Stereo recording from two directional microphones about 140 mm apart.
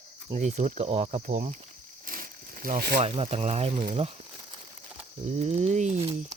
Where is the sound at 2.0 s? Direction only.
80° right.